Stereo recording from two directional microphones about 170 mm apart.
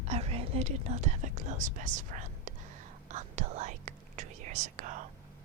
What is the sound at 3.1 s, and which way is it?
Whispering, 45° right (ahead or behind).